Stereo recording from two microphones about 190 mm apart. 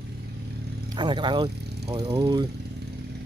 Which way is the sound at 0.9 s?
25° right (ahead or behind).